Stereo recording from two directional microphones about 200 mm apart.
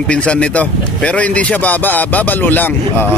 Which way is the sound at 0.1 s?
5° left (ahead or behind).